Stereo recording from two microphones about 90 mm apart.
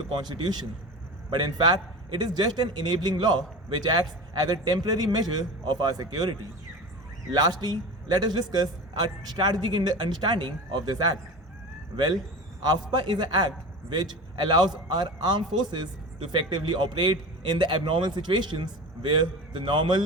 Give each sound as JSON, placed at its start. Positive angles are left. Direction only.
{"t": 0.1, "sound": "a man's voice", "side_deg": -55}
{"t": 12.6, "sound": "a man's voice", "side_deg": -55}